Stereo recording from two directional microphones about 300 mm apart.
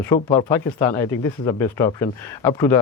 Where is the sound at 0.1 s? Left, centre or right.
Centre.